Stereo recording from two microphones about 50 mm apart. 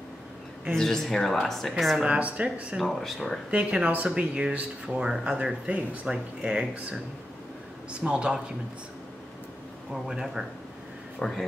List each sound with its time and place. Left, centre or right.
0.7 s speech: centre
2.0 s speech: right
2.8 s speech: centre
3.4 s speech: right
4.8 s speech: centre
5.7 s speech: right
6.1 s speech: centre
7.9 s speech: right
10.0 s speech: centre
11.1 s speech: centre